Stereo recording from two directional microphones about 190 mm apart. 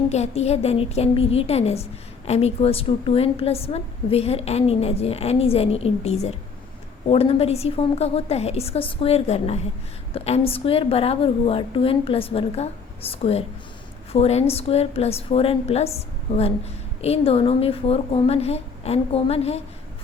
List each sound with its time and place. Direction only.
0.1 s a woman's voice: 35° left (ahead or behind)